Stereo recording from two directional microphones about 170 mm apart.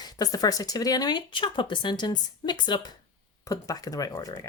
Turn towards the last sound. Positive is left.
turn(degrees=25)  # may be behind; listen again after turning